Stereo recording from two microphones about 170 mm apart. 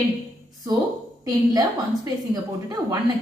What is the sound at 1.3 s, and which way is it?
A woman's voice, 20° right (ahead or behind).